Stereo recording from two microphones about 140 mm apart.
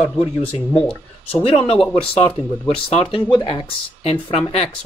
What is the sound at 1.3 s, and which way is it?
Speech, 40° left (ahead or behind).